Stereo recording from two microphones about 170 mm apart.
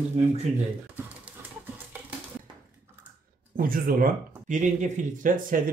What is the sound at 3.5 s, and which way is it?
Speech, 55° right (ahead or behind).